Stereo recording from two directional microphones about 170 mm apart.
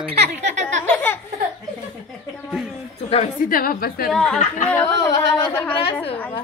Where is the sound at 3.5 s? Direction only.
60° left (ahead or behind).